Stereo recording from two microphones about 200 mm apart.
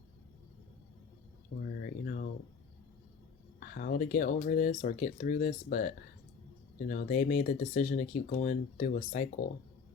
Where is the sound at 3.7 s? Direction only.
45° left (ahead or behind).